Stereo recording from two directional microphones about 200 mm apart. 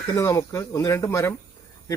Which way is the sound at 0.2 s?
15° left (ahead or behind).